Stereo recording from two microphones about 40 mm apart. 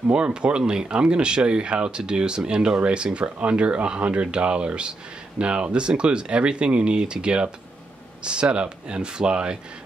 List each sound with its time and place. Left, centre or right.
0.1 s speech: right